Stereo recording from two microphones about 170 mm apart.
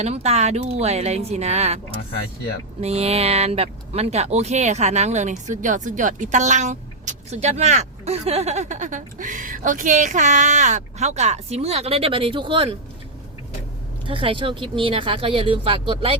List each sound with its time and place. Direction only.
0.0 s speech: 40° right (ahead or behind)
2.1 s speech: 70° left (ahead or behind)
2.8 s speech: 40° right (ahead or behind)
14.1 s speech: 30° right (ahead or behind)